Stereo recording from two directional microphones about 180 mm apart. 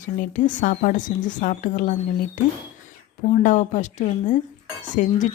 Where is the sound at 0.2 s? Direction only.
45° left (ahead or behind).